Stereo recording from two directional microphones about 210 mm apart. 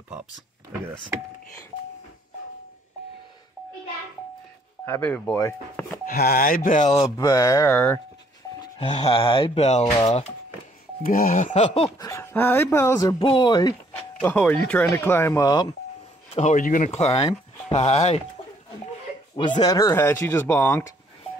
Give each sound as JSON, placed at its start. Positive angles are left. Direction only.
{"t": 4.8, "sound": "speech", "side_deg": 10}
{"t": 6.0, "sound": "speech", "side_deg": 45}
{"t": 7.0, "sound": "speech", "side_deg": 15}
{"t": 8.7, "sound": "speech", "side_deg": 25}
{"t": 9.8, "sound": "speech", "side_deg": 15}
{"t": 11.1, "sound": "speech", "side_deg": 40}
{"t": 12.1, "sound": "speech", "side_deg": 10}
{"t": 16.3, "sound": "speech", "side_deg": 35}
{"t": 19.3, "sound": "speech", "side_deg": 20}